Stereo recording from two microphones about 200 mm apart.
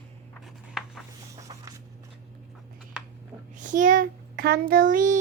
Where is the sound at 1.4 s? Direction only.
15° right (ahead or behind).